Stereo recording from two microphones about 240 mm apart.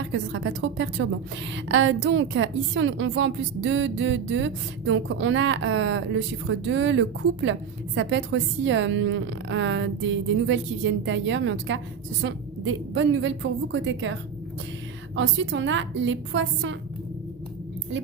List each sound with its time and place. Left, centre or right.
0.0 s a woman's voice: right